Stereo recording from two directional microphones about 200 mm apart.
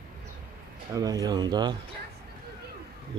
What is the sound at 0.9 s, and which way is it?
Speech, 20° right (ahead or behind).